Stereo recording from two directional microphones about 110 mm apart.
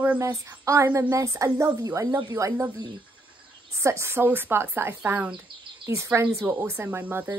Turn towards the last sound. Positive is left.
turn(degrees=-15)  # may be behind; listen again after turning